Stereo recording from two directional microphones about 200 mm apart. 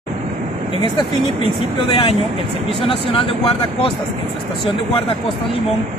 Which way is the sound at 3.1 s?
25° left (ahead or behind).